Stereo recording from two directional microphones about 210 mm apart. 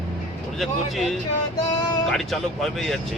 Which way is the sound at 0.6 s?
Centre (ahead or behind).